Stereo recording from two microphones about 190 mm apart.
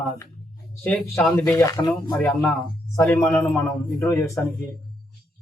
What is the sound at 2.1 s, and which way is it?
Speech, 5° left (ahead or behind).